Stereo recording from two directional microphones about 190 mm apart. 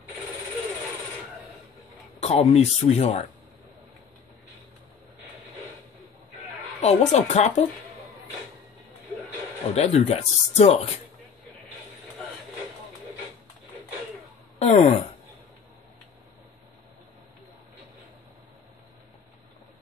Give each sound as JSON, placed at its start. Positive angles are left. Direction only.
{"t": 2.1, "sound": "a sound", "side_deg": 35}
{"t": 2.5, "sound": "speech", "side_deg": 35}
{"t": 6.8, "sound": "speech", "side_deg": 35}
{"t": 9.8, "sound": "speech", "side_deg": 35}
{"t": 14.6, "sound": "speech", "side_deg": 35}